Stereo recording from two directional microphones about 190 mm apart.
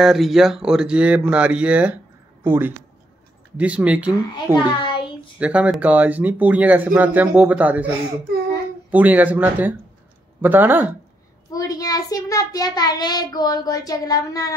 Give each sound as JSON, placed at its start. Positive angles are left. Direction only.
{"t": 0.0, "sound": "speech", "side_deg": 0}
{"t": 4.6, "sound": "a child's voice", "side_deg": 25}
{"t": 5.4, "sound": "speech", "side_deg": -5}
{"t": 8.9, "sound": "speech", "side_deg": -10}
{"t": 11.5, "sound": "child singing", "side_deg": 20}